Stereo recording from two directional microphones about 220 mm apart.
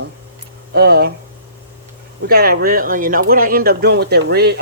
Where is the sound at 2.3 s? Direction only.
45° right (ahead or behind).